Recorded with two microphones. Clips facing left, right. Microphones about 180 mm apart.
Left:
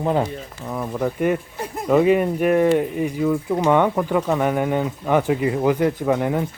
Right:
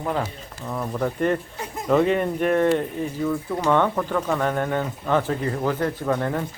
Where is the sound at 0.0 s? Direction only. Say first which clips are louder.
Left 5 dB; 25° left (ahead or behind).